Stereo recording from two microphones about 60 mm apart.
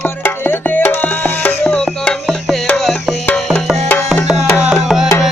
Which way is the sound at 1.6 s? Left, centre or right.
Centre.